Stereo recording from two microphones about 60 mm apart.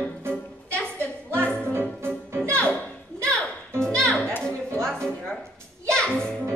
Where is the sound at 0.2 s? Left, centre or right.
Right.